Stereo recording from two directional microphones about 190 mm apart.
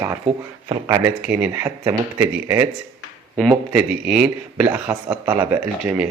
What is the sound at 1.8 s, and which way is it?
Speech, 20° right (ahead or behind).